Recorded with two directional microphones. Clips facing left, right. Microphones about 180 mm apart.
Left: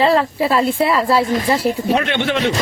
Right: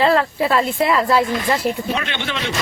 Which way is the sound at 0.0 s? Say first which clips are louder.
Left 1 dB; centre (ahead or behind).